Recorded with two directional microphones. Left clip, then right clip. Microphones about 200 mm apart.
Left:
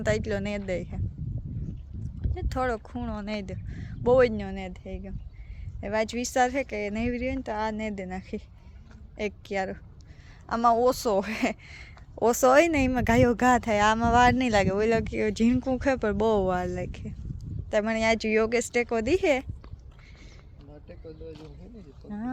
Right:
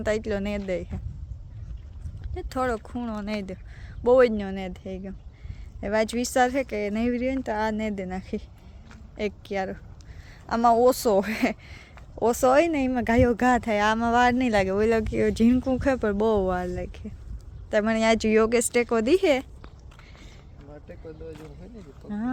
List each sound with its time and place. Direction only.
0.0 s speech: 10° right (ahead or behind)
2.2 s a woman's voice: 10° right (ahead or behind)
17.7 s speech: 15° right (ahead or behind)
20.8 s vehicle: 10° right (ahead or behind)
22.0 s speech: 15° right (ahead or behind)